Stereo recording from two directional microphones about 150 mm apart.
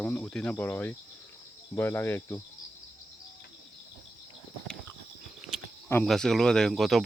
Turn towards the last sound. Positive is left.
turn(degrees=0)  # may be behind; listen again after turning